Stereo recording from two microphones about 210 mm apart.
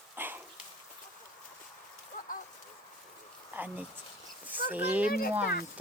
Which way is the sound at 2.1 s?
40° left (ahead or behind).